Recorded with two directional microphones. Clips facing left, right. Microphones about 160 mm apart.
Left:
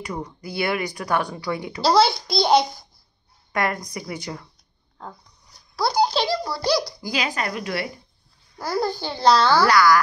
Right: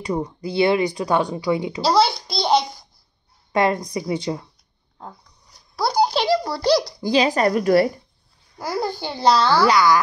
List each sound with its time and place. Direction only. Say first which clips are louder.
0.0 s speech: right 7 dB; 30° right (ahead or behind)
1.9 s a child's voice: left 1 dB; centre (ahead or behind)
3.5 s speech: right 6 dB; 25° right (ahead or behind)
5.8 s a sound: right 1 dB; 10° right (ahead or behind)
6.6 s speech: right 4 dB; 25° right (ahead or behind); by 7.9 s 40° right (ahead or behind)
8.5 s a child's voice: even; 20° right (ahead or behind)